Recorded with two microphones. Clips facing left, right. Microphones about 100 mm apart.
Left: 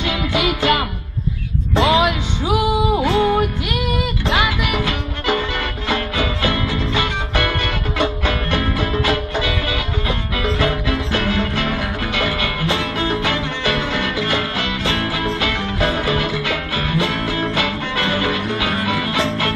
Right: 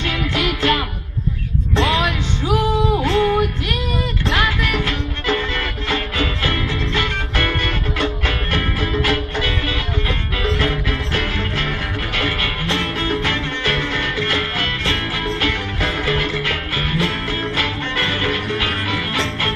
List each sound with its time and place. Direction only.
0.0 s music: 15° left (ahead or behind)